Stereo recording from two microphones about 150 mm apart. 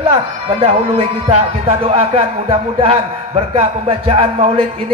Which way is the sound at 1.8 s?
40° right (ahead or behind).